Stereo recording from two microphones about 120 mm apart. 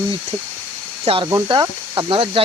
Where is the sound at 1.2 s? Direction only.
35° right (ahead or behind).